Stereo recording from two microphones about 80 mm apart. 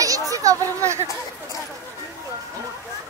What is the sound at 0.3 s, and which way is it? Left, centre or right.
Speech, right.